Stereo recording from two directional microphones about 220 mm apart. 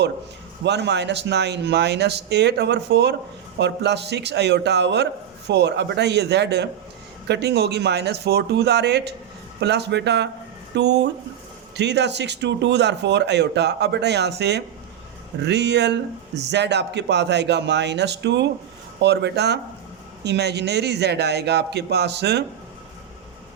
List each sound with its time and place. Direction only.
0.6 s speech: 50° right (ahead or behind)